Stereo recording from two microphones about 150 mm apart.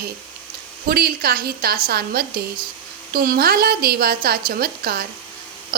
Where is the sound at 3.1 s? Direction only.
80° right.